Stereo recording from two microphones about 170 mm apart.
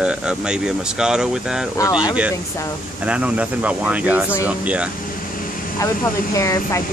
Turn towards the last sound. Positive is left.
turn(degrees=20)  # may be behind; listen again after turning